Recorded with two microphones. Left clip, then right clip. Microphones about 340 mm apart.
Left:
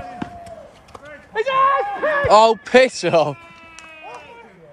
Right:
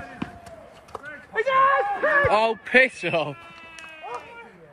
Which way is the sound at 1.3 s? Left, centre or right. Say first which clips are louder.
Left 3 dB; left.